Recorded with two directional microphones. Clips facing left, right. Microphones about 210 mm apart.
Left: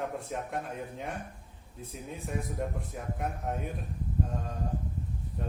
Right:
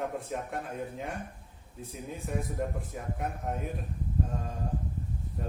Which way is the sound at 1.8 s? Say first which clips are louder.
Right 1 dB; centre (ahead or behind).